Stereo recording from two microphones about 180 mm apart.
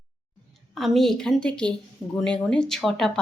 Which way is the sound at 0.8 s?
Centre (ahead or behind).